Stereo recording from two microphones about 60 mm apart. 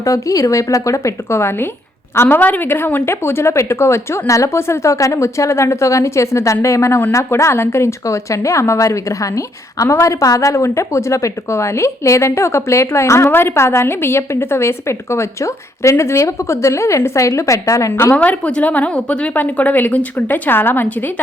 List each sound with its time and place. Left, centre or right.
0.0 s a woman's voice: left
8.0 s a woman's voice: left
18.1 s a woman's voice: left